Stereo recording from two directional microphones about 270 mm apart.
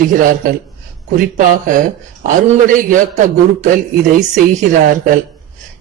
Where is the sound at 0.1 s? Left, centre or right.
Right.